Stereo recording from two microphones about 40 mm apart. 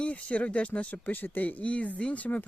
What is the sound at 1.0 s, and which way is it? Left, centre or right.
Speech, left.